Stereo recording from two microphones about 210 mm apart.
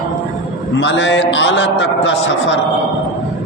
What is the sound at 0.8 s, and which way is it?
A man's voice, 60° left (ahead or behind).